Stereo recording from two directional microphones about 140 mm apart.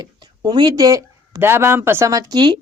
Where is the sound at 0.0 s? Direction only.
30° right (ahead or behind).